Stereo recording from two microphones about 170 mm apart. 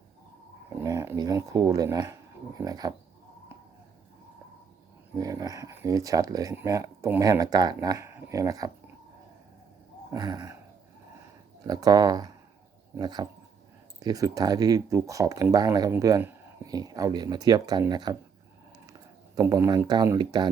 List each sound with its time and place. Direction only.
0.8 s speech: 15° right (ahead or behind)
5.1 s speech: 20° right (ahead or behind)
10.1 s speech: 25° right (ahead or behind)
11.6 s speech: 20° right (ahead or behind)